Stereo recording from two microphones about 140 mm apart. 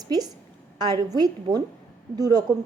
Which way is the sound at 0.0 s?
30° right (ahead or behind).